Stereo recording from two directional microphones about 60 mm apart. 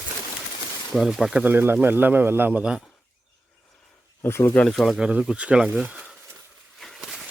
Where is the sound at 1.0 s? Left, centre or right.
Centre.